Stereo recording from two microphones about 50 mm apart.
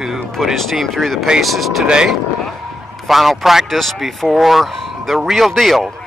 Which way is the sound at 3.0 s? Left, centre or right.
Centre.